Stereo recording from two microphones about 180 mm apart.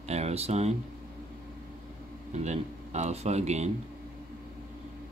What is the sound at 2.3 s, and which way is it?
Speech, 40° right (ahead or behind).